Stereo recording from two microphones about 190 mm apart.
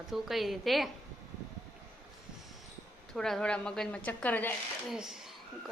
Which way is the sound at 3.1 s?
5° left (ahead or behind).